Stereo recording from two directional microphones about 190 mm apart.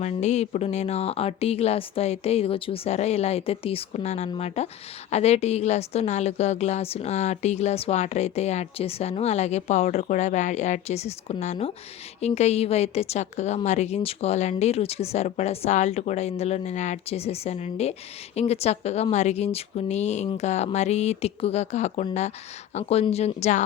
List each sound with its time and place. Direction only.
0.0 s a woman's voice: 35° left (ahead or behind)